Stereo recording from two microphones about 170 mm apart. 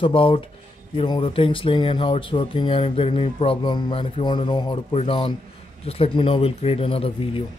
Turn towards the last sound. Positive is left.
turn(degrees=35)  # may be behind; listen again after turning